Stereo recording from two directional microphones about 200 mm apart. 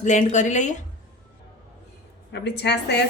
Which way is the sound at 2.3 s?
60° left (ahead or behind).